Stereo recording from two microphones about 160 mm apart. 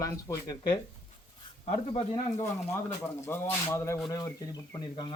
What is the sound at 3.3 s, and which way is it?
Speech, 15° left (ahead or behind).